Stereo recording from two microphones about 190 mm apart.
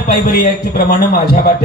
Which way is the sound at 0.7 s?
50° left (ahead or behind).